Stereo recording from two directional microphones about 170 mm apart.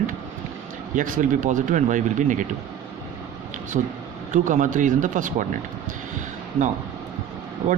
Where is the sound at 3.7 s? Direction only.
45° right (ahead or behind).